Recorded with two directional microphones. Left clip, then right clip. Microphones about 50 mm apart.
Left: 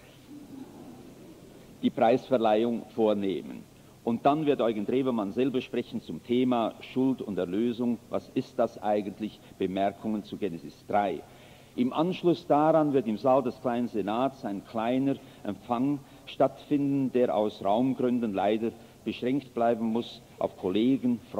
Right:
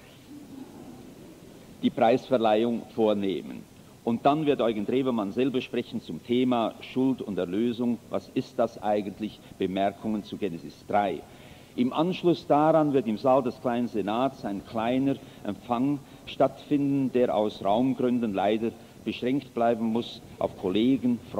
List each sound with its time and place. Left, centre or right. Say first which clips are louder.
1.8 s a man's voice: right 1 dB; right